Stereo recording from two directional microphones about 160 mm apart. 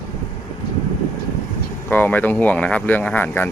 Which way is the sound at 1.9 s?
10° left (ahead or behind).